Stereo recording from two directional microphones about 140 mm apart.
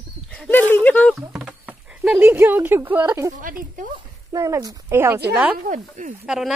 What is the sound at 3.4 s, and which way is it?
Speech, 75° right (ahead or behind).